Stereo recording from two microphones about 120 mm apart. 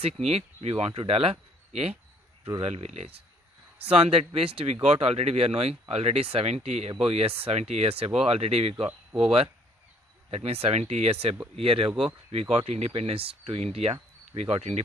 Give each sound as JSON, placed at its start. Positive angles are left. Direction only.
{"t": 0.0, "sound": "speech", "side_deg": -60}
{"t": 10.3, "sound": "speech", "side_deg": -60}